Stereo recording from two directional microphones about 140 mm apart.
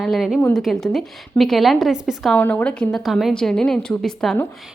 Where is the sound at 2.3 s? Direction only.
10° left (ahead or behind).